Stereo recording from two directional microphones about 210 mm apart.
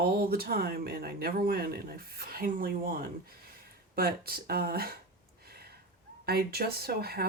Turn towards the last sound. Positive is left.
turn(degrees=-45)  # may be behind; listen again after turning